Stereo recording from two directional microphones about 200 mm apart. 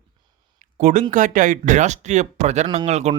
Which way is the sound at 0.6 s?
40° right (ahead or behind).